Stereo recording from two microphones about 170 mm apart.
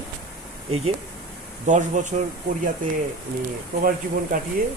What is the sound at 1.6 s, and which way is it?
Speech, 45° right (ahead or behind).